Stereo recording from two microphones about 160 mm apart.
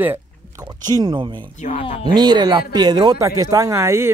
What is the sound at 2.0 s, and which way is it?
Speech, 25° right (ahead or behind).